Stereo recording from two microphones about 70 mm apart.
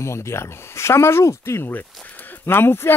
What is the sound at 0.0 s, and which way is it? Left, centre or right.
Speech, left.